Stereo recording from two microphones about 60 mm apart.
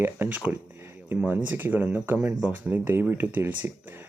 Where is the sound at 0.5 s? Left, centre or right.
Right.